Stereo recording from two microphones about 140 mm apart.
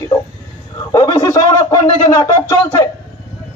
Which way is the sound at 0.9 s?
30° left (ahead or behind).